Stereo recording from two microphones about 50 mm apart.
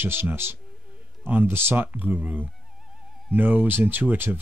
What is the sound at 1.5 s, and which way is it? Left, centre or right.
Speech, right.